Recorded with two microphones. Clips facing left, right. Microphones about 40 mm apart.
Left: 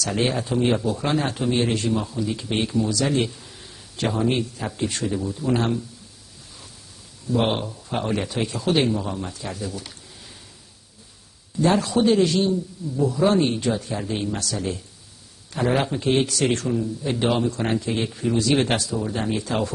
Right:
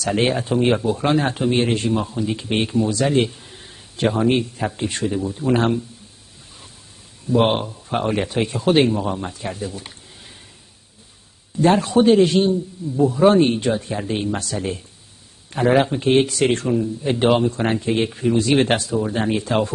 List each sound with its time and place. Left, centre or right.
0.0 s a man's voice: right
7.2 s a man's voice: right
11.6 s a man's voice: right